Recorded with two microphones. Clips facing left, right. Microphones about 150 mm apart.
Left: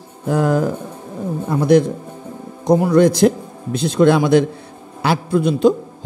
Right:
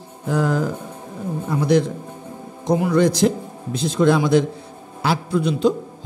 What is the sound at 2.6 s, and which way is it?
A man's voice, 45° left (ahead or behind).